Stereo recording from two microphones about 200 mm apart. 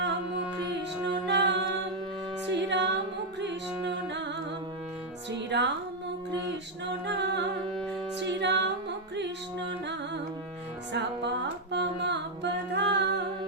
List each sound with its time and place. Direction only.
0.0 s music: 60° right (ahead or behind)
5.5 s music: 60° right (ahead or behind)
7.1 s music: 60° right (ahead or behind)
10.9 s music: 60° right (ahead or behind)